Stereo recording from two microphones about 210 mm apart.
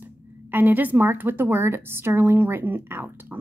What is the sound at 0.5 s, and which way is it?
A woman's voice, 10° right (ahead or behind).